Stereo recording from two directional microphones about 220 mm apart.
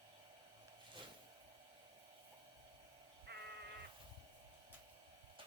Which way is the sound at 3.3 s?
50° right (ahead or behind).